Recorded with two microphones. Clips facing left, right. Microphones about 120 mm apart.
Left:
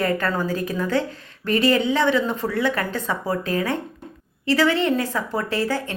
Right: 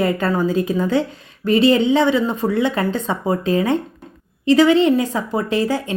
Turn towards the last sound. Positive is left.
turn(degrees=-15)  # may be behind; listen again after turning